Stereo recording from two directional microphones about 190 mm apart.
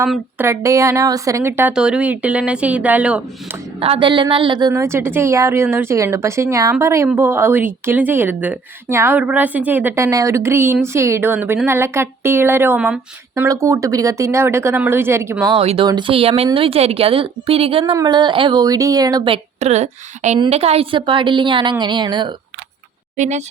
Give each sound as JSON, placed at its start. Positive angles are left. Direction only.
{"t": 0.3, "sound": "a woman's voice", "side_deg": -15}
{"t": 3.8, "sound": "a woman's voice", "side_deg": -30}
{"t": 15.5, "sound": "a woman's voice", "side_deg": -30}
{"t": 23.1, "sound": "speech", "side_deg": -40}